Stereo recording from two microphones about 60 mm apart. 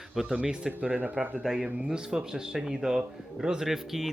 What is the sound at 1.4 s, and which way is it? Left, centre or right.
Speech, centre.